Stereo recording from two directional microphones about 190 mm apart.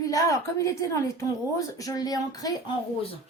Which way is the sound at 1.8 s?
20° left (ahead or behind).